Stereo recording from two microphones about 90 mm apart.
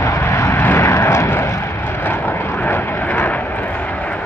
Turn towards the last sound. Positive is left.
turn(degrees=20)  # may be behind; listen again after turning